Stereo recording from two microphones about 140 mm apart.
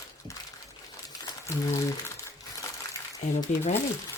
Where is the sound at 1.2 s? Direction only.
20° left (ahead or behind).